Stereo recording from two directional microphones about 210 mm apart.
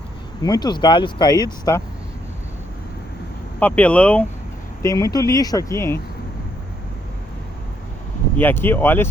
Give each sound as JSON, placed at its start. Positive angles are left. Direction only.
{"t": 0.4, "sound": "speech", "side_deg": 20}
{"t": 3.6, "sound": "speech", "side_deg": 5}
{"t": 8.4, "sound": "speech", "side_deg": 10}